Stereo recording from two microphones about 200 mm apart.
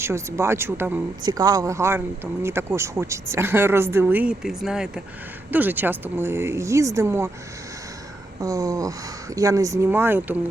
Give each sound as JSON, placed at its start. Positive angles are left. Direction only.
{"t": 0.0, "sound": "speech", "side_deg": -15}
{"t": 8.4, "sound": "speech", "side_deg": -15}